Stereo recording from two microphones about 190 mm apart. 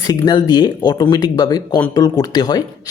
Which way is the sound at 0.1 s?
20° left (ahead or behind).